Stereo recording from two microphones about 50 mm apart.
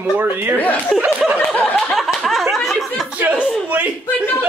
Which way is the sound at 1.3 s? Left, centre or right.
Left.